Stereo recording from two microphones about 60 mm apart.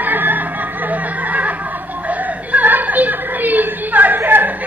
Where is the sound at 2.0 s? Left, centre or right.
Right.